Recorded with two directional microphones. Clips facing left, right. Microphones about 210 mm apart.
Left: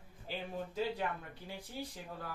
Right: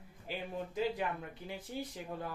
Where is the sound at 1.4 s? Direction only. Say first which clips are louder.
Right 2 dB; 20° right (ahead or behind).